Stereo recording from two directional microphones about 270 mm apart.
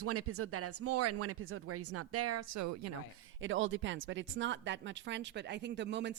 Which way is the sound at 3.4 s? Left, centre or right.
Right.